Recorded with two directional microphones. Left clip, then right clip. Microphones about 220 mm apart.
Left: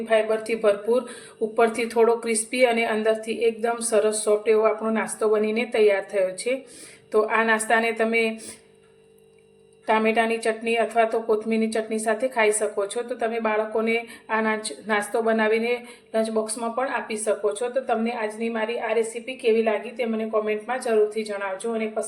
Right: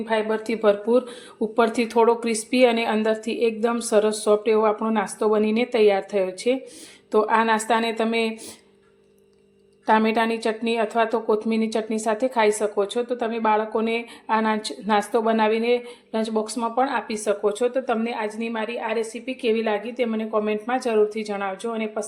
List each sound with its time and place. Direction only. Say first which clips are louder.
0.1 s speech: left 2 dB; 25° right (ahead or behind)
9.8 s speech: right 1 dB; 30° right (ahead or behind)